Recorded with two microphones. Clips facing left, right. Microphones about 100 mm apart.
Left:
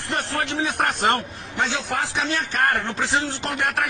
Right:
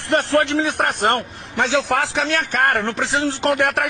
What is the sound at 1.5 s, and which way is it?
A man's voice, 90° right.